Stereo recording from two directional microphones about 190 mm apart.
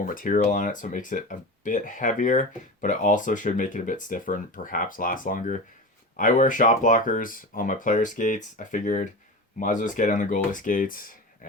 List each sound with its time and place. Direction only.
0.0 s speech: 45° left (ahead or behind)